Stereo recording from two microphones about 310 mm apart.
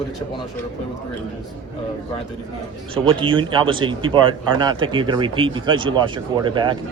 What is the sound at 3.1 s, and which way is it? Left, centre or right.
Speech, centre.